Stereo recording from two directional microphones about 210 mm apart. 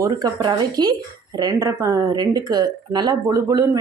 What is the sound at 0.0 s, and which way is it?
A woman's voice, 20° right (ahead or behind).